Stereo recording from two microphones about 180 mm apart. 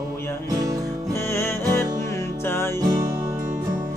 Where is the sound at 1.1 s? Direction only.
15° left (ahead or behind).